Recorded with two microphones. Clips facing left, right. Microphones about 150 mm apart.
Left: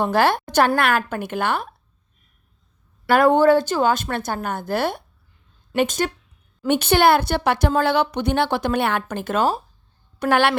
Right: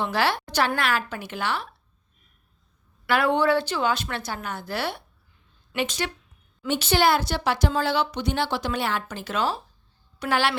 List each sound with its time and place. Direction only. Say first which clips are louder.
0.0 s a woman's voice: left 6 dB; 50° left (ahead or behind)
3.1 s a woman's voice: left 7 dB; 45° left (ahead or behind)